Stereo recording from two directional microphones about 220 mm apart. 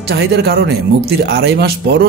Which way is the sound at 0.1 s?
45° right (ahead or behind).